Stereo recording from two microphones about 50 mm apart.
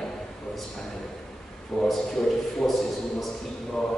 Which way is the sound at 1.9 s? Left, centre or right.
Centre.